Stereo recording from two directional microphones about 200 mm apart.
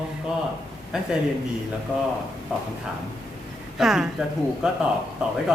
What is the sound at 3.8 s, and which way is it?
Speech, centre (ahead or behind).